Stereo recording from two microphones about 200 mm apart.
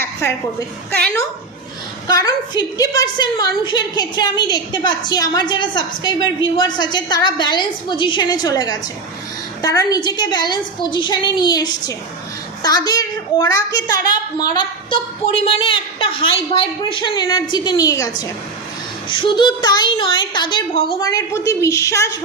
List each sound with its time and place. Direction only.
0.0 s a sound: 10° left (ahead or behind)
0.9 s a woman's voice: 5° left (ahead or behind)
2.0 s a woman's voice: 20° left (ahead or behind)